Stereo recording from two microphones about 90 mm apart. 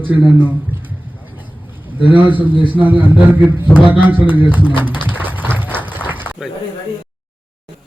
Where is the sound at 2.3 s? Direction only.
20° right (ahead or behind).